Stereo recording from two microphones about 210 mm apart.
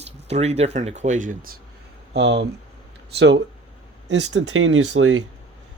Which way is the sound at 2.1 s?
50° right (ahead or behind).